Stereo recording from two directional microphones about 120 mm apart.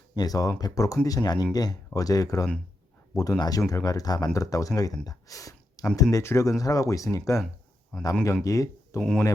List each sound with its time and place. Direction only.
0.2 s speech: 30° left (ahead or behind)
7.9 s speech: centre (ahead or behind)
8.4 s speech: 25° left (ahead or behind)
9.0 s speech: 5° left (ahead or behind)